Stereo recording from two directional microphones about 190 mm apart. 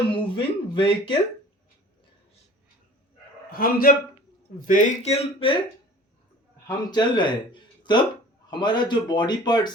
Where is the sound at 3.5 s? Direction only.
50° left (ahead or behind); by 5.5 s 30° left (ahead or behind).